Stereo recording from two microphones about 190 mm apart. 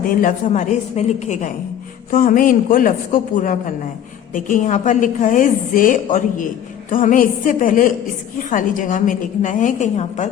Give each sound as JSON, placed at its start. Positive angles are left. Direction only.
{"t": 0.0, "sound": "a woman's voice", "side_deg": 45}